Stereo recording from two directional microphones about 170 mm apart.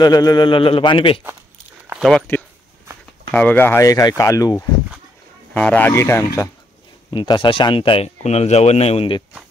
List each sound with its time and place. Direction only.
0.0 s speech: 20° left (ahead or behind)
1.9 s a sound: centre (ahead or behind)
3.3 s speech: 10° left (ahead or behind)
5.5 s speech: 10° left (ahead or behind)
7.1 s speech: 30° left (ahead or behind)